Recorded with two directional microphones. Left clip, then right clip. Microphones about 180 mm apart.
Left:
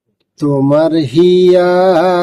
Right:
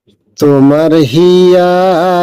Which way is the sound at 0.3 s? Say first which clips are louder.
Right 4 dB; 40° right (ahead or behind).